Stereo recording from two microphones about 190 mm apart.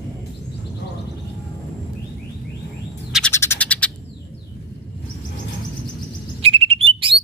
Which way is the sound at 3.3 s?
10° left (ahead or behind).